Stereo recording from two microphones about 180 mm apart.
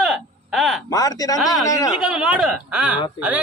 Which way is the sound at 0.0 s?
Centre (ahead or behind).